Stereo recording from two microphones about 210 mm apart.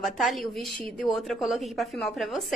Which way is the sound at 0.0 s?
Centre (ahead or behind).